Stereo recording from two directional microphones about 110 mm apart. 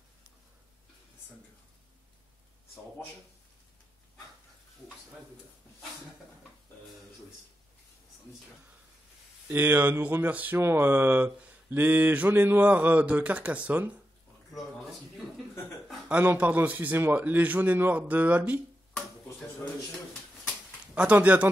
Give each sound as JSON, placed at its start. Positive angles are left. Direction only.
{"t": 9.5, "sound": "speech", "side_deg": -20}
{"t": 16.1, "sound": "speech", "side_deg": -15}
{"t": 20.9, "sound": "speech", "side_deg": -15}